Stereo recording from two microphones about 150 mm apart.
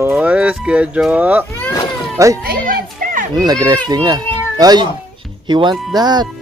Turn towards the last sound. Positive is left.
turn(degrees=-30)  # may be behind; listen again after turning